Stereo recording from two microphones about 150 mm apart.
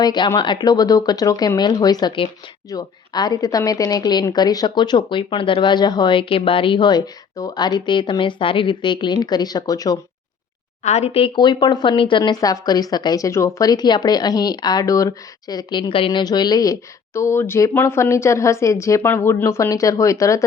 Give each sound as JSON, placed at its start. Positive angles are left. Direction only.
{"t": 0.0, "sound": "a woman's voice", "side_deg": 30}
{"t": 10.8, "sound": "a woman's voice", "side_deg": 45}